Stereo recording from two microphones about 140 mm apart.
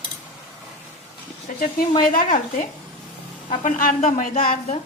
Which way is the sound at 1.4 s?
75° left (ahead or behind).